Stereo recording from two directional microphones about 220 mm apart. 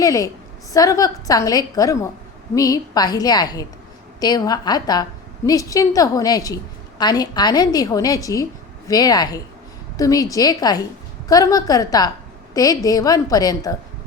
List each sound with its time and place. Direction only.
0.0 s a woman's voice: 15° left (ahead or behind)